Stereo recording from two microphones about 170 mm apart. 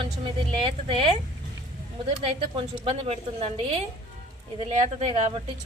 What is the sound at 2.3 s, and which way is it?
A woman's voice, 35° right (ahead or behind).